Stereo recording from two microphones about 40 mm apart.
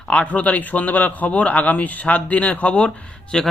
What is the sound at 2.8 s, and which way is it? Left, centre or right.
Speech, centre.